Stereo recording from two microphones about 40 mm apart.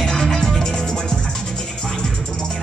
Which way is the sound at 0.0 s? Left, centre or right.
Centre.